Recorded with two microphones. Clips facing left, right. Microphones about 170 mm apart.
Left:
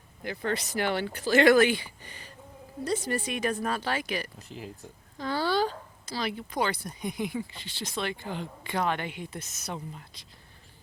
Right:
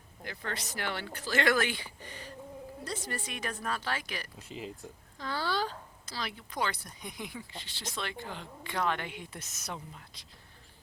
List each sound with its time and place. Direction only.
0.3 s speech: 15° left (ahead or behind)
4.5 s speech: centre (ahead or behind)
5.2 s a sound: 15° left (ahead or behind)
6.1 s speech: 15° left (ahead or behind); by 9.7 s centre (ahead or behind)